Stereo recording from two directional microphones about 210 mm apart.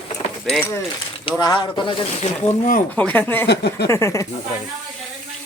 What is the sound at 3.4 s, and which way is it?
Speech, 55° left (ahead or behind).